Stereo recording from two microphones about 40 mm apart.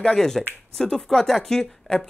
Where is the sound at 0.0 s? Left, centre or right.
Centre.